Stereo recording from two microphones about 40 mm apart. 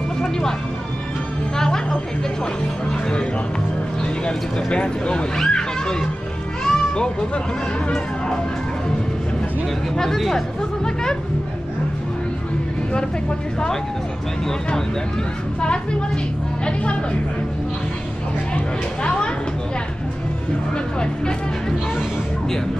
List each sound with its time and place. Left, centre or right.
0.2 s vehicle: centre
1.6 s music: centre
2.9 s speech: left
6.6 s music: centre
9.9 s speech: centre
19.0 s speech: left
20.7 s speech: left